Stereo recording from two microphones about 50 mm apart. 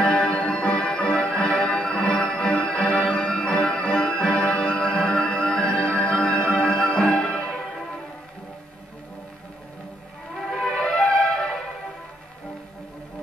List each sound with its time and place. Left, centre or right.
0.0 s music: centre
10.5 s music: centre